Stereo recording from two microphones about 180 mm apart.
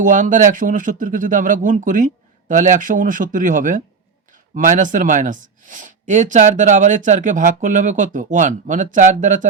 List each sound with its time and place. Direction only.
0.0 s speech: 45° right (ahead or behind)